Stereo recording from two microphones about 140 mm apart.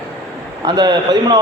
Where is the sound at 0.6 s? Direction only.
30° right (ahead or behind).